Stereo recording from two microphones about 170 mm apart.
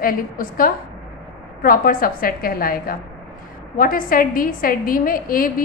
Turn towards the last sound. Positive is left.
turn(degrees=55)  # may be behind; listen again after turning